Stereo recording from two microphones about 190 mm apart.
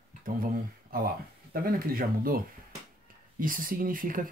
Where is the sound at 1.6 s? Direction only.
50° right (ahead or behind).